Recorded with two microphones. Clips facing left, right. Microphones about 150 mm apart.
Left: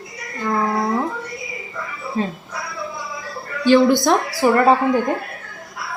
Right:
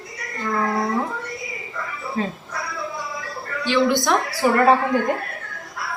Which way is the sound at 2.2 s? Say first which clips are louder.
Left 2 dB; 30° left (ahead or behind).